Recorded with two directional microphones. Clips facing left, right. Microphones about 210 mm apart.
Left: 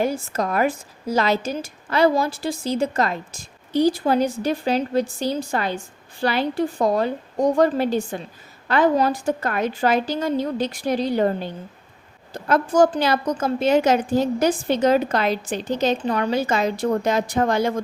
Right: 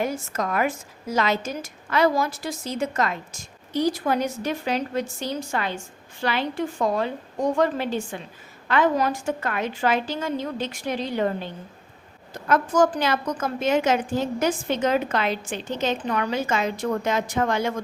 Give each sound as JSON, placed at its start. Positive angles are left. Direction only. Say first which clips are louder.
{"t": 0.0, "sound": "a woman's voice", "louder": "left 4 dB", "side_deg": 30}